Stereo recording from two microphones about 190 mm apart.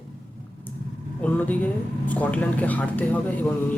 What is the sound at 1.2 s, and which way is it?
Speech, 10° left (ahead or behind).